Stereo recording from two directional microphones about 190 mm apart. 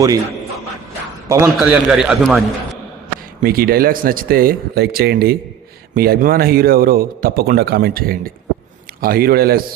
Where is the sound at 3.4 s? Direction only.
50° right (ahead or behind).